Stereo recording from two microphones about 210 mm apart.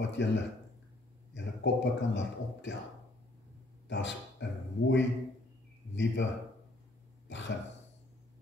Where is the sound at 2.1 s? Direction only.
55° left (ahead or behind).